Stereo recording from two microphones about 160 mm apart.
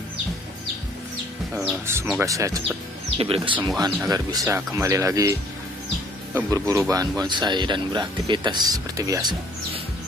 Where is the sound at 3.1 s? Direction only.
35° right (ahead or behind).